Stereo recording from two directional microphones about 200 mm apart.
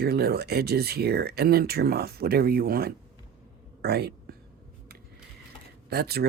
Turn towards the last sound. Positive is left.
turn(degrees=-50)  # may be behind; listen again after turning